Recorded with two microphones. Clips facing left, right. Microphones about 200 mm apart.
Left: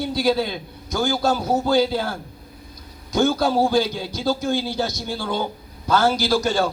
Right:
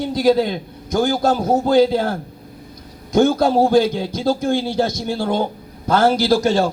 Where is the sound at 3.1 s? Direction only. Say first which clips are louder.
Right 4 dB; 25° right (ahead or behind).